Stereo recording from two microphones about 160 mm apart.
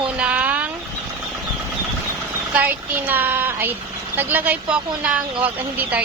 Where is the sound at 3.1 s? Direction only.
10° right (ahead or behind).